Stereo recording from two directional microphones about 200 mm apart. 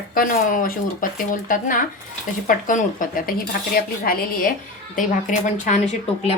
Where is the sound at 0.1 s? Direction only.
45° left (ahead or behind).